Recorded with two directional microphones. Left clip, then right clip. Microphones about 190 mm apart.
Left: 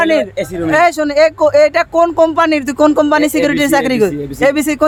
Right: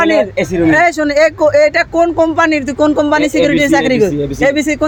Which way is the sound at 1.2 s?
15° left (ahead or behind).